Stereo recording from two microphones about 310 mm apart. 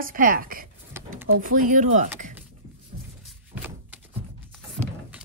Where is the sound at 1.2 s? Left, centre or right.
Right.